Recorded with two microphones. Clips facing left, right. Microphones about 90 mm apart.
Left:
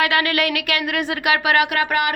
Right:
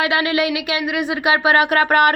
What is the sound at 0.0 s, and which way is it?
Speech, 20° right (ahead or behind).